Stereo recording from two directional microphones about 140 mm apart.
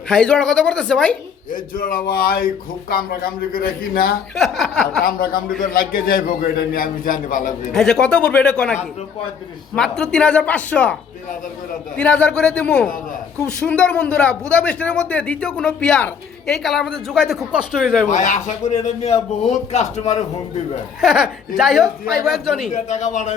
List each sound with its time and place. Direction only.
0.1 s speech: 5° left (ahead or behind)
1.5 s a man's voice: 75° left (ahead or behind)
4.4 s speech: centre (ahead or behind)
5.0 s a man's voice: 90° left; by 7.7 s 65° left (ahead or behind)
7.7 s a man's voice: 5° left (ahead or behind)
11.9 s a man's voice: 10° left (ahead or behind)
18.1 s a man's voice: 60° left (ahead or behind)
21.0 s speech: 5° right (ahead or behind)
22.7 s a man's voice: 60° left (ahead or behind)